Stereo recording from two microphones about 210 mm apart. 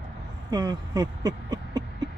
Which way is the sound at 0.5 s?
20° right (ahead or behind).